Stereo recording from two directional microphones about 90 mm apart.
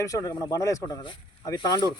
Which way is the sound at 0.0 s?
40° left (ahead or behind).